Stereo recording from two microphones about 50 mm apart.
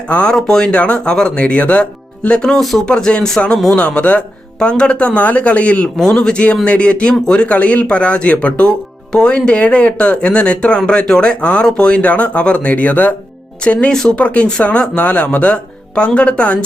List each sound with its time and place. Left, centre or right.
0.1 s speech: left
2.6 s speech: centre
2.8 s speech: centre
3.8 s speech: left
13.9 s speech: centre
14.2 s speech: left